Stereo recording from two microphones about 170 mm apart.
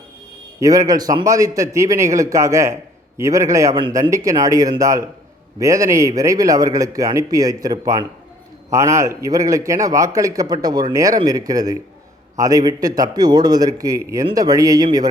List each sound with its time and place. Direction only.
0.6 s a man's voice: 20° right (ahead or behind)
3.8 s a man's voice: 30° right (ahead or behind)
4.1 s a man's voice: 20° right (ahead or behind)